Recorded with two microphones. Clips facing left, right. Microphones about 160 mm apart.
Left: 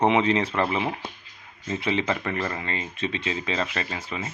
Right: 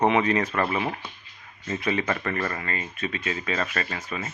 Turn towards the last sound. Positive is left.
turn(degrees=15)  # may be behind; listen again after turning